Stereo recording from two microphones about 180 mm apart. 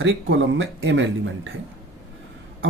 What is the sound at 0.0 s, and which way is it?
Speech, 90° right.